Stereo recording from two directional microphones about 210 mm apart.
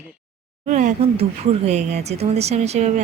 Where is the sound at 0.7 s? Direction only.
35° right (ahead or behind).